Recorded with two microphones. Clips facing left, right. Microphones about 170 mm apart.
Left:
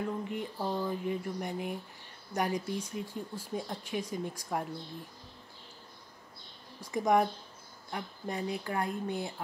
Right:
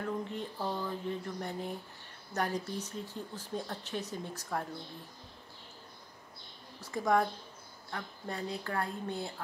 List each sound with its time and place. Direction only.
0.3 s speech: 15° left (ahead or behind)
6.8 s speech: 15° left (ahead or behind)